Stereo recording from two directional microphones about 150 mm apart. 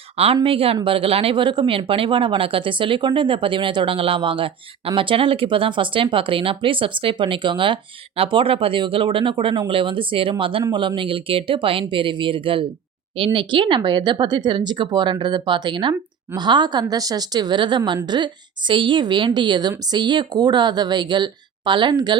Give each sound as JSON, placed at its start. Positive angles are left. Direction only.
{"t": 0.4, "sound": "speech", "side_deg": -40}